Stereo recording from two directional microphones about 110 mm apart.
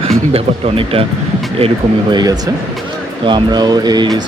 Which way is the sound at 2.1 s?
35° right (ahead or behind).